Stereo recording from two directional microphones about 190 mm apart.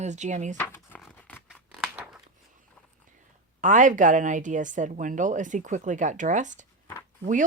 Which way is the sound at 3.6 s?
40° right (ahead or behind).